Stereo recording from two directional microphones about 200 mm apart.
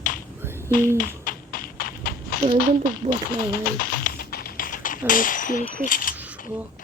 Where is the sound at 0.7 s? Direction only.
45° left (ahead or behind).